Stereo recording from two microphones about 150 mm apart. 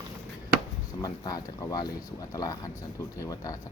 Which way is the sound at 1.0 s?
25° left (ahead or behind).